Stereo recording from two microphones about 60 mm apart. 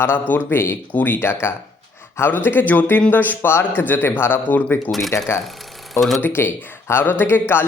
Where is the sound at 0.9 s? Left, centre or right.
Left.